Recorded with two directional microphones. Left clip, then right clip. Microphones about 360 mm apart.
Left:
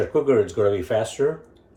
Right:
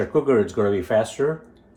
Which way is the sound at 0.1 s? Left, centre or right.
Right.